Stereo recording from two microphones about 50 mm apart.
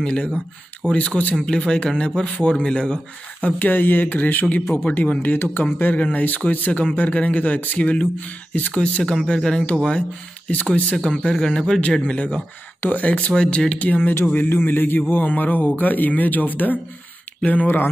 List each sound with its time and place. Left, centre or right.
0.0 s speech: left
1.4 s speech: centre
5.3 s speech: left
5.9 s speech: left
9.1 s a man's voice: centre
10.5 s a man's voice: left
12.8 s a man's voice: left
13.3 s speech: centre
14.3 s a man's voice: left